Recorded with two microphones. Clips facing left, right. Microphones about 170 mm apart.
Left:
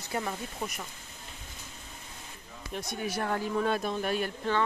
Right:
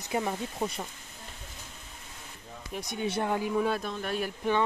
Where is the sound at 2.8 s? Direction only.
20° right (ahead or behind).